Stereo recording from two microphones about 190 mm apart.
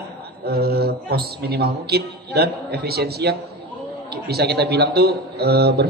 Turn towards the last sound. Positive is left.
turn(degrees=-60)  # may be behind; listen again after turning